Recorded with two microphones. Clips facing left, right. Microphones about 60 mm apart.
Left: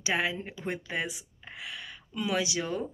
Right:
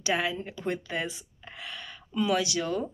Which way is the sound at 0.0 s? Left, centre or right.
Left.